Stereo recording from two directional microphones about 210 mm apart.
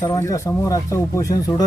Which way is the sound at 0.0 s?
15° left (ahead or behind).